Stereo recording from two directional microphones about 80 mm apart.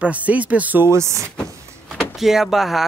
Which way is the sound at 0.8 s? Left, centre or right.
Right.